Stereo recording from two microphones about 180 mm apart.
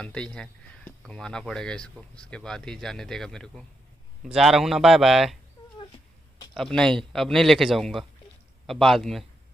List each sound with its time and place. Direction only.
0.0 s speech: 5° left (ahead or behind)
5.8 s cat: 25° left (ahead or behind)
6.5 s speech: 5° left (ahead or behind)